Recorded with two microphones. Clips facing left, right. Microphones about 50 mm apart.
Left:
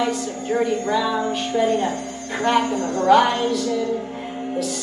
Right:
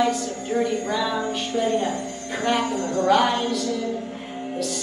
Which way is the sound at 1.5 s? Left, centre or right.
Left.